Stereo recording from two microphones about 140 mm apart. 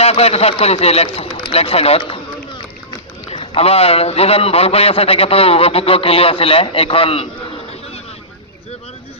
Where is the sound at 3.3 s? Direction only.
45° left (ahead or behind).